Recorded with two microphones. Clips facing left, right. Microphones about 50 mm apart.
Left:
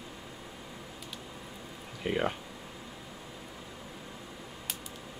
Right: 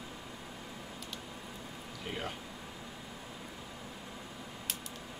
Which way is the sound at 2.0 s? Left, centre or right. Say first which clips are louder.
Left 9 dB; left.